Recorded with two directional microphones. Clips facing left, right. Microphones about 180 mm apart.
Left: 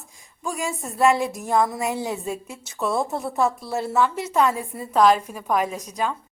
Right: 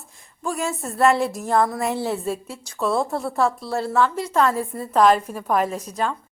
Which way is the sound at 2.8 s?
Centre (ahead or behind).